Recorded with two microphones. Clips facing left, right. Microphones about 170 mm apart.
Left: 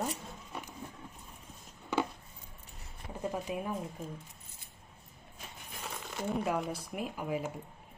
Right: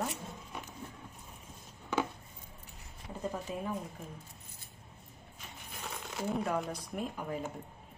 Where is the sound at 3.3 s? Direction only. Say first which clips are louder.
Left 2 dB; 15° left (ahead or behind).